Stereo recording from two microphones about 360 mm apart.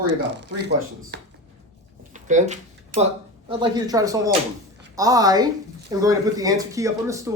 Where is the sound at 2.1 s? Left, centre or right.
Centre.